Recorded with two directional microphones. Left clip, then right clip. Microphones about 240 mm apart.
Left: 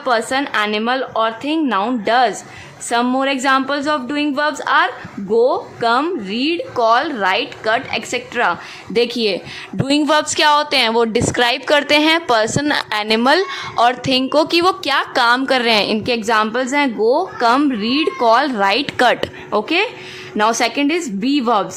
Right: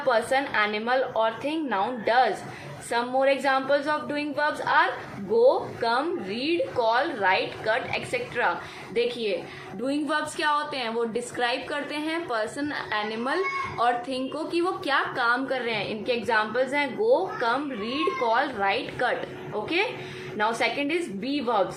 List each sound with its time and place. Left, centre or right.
0.1 s a woman's voice: left